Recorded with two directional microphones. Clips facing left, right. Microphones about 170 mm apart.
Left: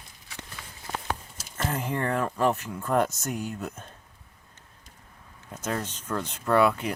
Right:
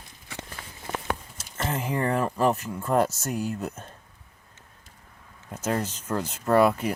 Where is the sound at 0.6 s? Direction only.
50° right (ahead or behind).